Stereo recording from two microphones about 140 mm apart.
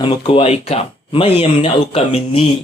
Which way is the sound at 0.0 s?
45° left (ahead or behind).